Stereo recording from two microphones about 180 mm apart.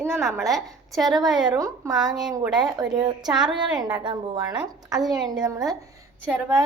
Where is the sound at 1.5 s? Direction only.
20° right (ahead or behind).